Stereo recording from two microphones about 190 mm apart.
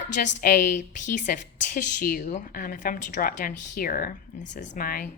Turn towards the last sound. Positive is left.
turn(degrees=50)  # may be behind; listen again after turning